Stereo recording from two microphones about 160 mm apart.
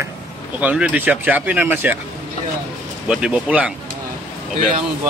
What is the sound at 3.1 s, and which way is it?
Speech, 5° right (ahead or behind).